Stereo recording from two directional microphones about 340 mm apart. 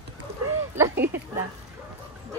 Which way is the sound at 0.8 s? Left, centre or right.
Centre.